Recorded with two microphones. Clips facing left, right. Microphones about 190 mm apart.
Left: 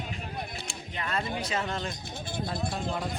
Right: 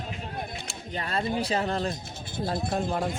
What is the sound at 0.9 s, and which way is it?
Speech, 35° right (ahead or behind).